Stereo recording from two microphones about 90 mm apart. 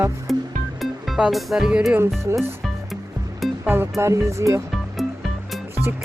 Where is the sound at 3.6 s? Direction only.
25° right (ahead or behind).